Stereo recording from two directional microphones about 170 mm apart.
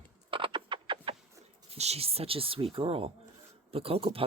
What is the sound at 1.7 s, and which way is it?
Speech, 40° right (ahead or behind).